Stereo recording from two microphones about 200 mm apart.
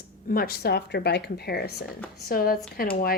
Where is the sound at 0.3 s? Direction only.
50° left (ahead or behind).